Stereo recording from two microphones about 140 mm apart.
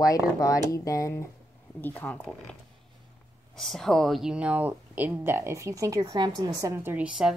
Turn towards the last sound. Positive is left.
turn(degrees=-5)  # may be behind; listen again after turning